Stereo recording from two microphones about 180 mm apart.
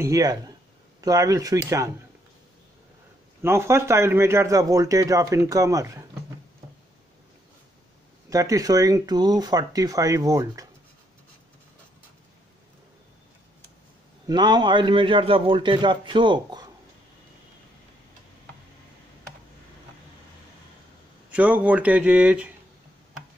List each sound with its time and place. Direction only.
0.0 s a man's voice: 20° right (ahead or behind)
3.4 s a man's voice: 15° right (ahead or behind)
8.3 s a man's voice: 20° right (ahead or behind)
14.2 s a man's voice: 25° right (ahead or behind)
21.3 s a man's voice: 10° right (ahead or behind)